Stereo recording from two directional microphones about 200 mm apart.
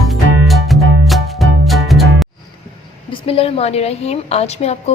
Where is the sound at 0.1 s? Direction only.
Centre (ahead or behind).